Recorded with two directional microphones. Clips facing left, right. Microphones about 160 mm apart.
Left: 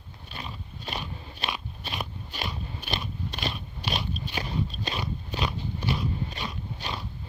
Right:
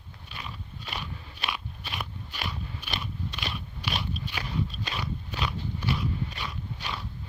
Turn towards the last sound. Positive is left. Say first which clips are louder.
# left 1 dB
turn(degrees=25)  # may be behind; listen again after turning